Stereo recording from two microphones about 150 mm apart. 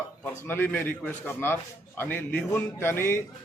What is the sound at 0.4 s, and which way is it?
A man's voice, 15° left (ahead or behind).